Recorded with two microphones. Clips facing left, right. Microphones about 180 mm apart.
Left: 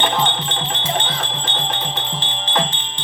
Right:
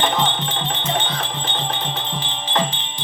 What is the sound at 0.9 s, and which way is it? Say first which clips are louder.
Music: even; 5° right (ahead or behind).